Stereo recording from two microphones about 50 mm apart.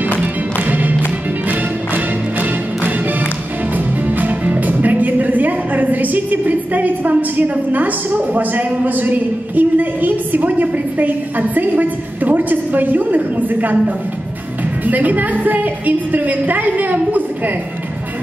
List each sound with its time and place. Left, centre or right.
0.2 s music: right
3.7 s a woman's voice: right